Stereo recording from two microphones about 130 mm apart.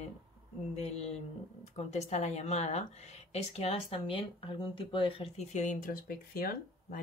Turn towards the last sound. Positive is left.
turn(degrees=90)